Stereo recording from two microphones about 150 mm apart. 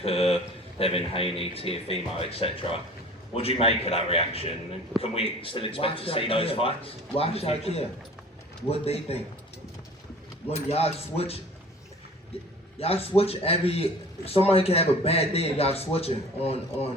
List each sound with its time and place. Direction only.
0.0 s a sound: 40° left (ahead or behind)
0.8 s a man's voice: 40° left (ahead or behind)
8.7 s coin: 45° left (ahead or behind)
10.5 s coin: 45° left (ahead or behind)
12.8 s a man's voice: 40° left (ahead or behind)